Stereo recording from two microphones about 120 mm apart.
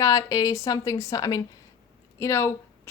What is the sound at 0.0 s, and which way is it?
A woman's voice, 30° left (ahead or behind).